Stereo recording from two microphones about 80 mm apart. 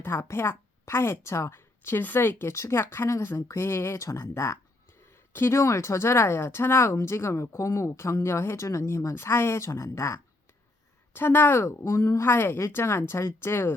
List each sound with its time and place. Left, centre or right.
0.0 s a woman's voice: left